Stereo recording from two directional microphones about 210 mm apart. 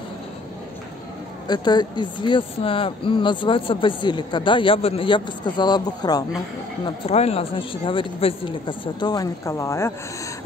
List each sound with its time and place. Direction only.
1.5 s speech: 20° left (ahead or behind)
7.1 s speech: 30° left (ahead or behind); by 9.9 s 15° left (ahead or behind)